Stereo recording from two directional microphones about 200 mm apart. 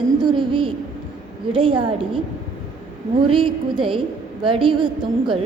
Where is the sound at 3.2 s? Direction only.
25° right (ahead or behind).